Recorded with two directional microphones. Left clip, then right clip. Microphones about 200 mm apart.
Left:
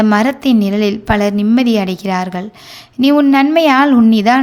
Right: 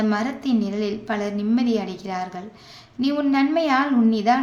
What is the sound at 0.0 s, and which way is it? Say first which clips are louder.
A woman's voice: left 11 dB; 45° left (ahead or behind).